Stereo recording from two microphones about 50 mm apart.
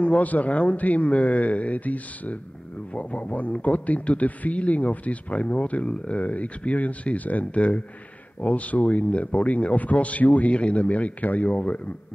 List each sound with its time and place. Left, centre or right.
0.0 s speech: left